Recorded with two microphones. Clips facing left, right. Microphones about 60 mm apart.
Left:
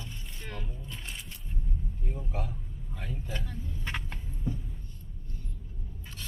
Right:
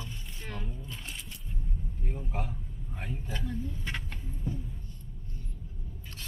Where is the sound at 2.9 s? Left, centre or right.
Right.